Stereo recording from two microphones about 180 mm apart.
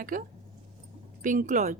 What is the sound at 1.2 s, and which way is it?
Speech, 45° right (ahead or behind).